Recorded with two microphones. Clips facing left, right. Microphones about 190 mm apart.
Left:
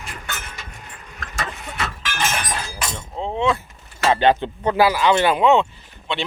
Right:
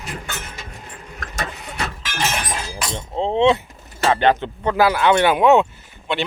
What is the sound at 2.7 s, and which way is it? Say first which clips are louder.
Chink: right 2 dB; 30° right (ahead or behind).